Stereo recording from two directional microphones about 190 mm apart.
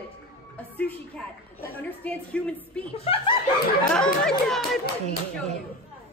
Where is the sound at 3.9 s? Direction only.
5° left (ahead or behind).